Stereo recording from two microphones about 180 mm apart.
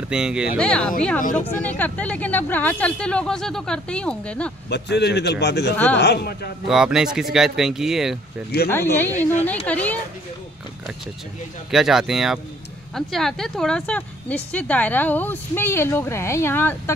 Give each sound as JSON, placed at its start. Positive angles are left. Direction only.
{"t": 0.1, "sound": "speech", "side_deg": -5}
{"t": 4.6, "sound": "a man's voice", "side_deg": 70}
{"t": 6.7, "sound": "speech", "side_deg": -5}
{"t": 8.6, "sound": "speech", "side_deg": 10}
{"t": 11.7, "sound": "speech", "side_deg": 0}